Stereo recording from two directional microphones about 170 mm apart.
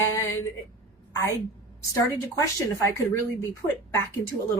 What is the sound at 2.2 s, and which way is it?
Speech, 20° left (ahead or behind).